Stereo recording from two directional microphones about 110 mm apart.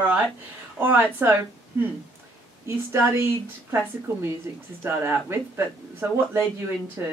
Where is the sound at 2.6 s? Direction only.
20° right (ahead or behind).